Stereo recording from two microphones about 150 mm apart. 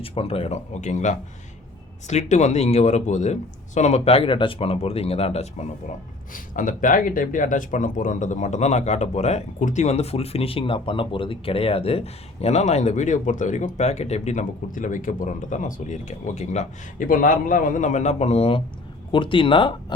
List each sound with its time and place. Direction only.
0.0 s speech: 40° left (ahead or behind)
6.3 s speech: 65° left (ahead or behind); by 19.7 s 35° left (ahead or behind)